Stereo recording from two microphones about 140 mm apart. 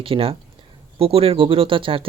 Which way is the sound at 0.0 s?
40° right (ahead or behind).